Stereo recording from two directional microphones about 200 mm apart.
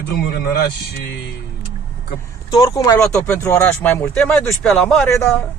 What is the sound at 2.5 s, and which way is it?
Speech, 15° left (ahead or behind).